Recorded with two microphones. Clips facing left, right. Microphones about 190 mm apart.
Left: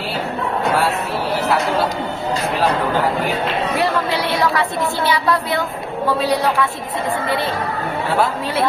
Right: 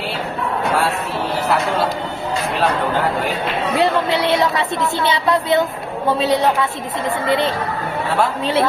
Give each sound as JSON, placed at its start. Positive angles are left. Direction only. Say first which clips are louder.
{"t": 3.8, "sound": "speech", "louder": "right 5 dB", "side_deg": -20}